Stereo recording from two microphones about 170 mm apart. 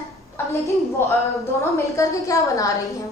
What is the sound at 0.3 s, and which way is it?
A woman's voice, 15° left (ahead or behind).